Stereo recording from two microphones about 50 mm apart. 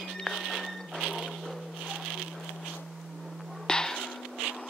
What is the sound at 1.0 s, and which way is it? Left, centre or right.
Music, centre.